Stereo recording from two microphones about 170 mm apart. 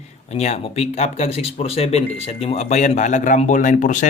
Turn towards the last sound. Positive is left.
turn(degrees=45)  # may be behind; listen again after turning